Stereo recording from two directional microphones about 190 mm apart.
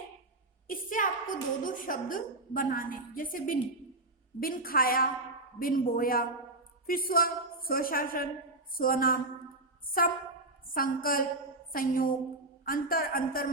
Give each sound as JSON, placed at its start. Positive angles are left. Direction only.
{"t": 0.7, "sound": "a woman's voice", "side_deg": 45}
{"t": 10.7, "sound": "a woman's voice", "side_deg": 50}